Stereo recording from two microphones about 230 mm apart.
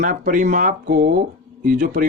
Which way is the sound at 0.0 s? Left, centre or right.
Right.